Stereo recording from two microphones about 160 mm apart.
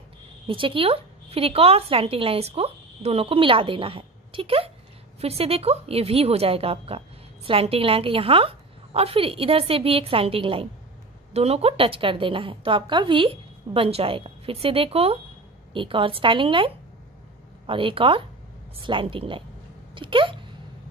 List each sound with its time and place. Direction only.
0.5 s a woman's voice: 35° right (ahead or behind)